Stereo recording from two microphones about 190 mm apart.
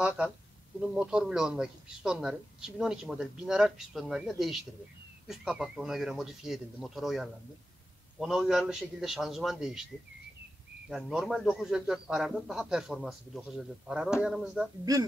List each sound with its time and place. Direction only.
0.7 s speech: 5° right (ahead or behind)
10.9 s speech: centre (ahead or behind)
14.9 s speech: 20° right (ahead or behind)